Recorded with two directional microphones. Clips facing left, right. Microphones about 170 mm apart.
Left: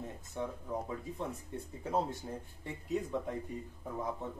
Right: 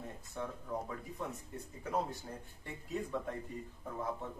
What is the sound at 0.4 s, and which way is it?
Speech, 15° left (ahead or behind).